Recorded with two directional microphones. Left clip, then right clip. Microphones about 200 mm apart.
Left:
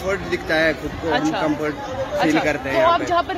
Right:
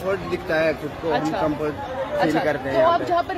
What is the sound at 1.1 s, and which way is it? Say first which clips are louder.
Speech: left 2 dB; 10° left (ahead or behind).